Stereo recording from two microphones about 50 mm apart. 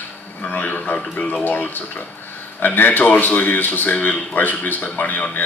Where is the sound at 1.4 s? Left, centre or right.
Left.